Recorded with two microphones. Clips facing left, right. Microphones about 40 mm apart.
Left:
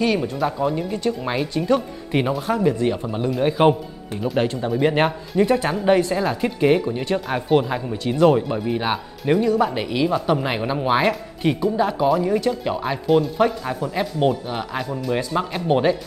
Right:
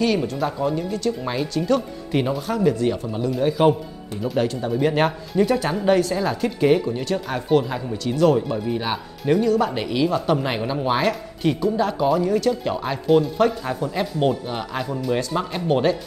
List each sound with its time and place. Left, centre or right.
0.0 s speech: centre
0.8 s speech: left
3.3 s speech: left; by 16.0 s centre